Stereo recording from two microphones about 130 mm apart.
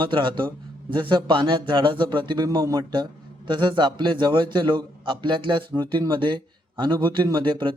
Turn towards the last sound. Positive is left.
turn(degrees=-40)  # may be behind; listen again after turning